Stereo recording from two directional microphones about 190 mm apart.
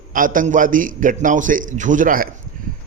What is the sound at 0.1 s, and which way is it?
A man's voice, 45° right (ahead or behind).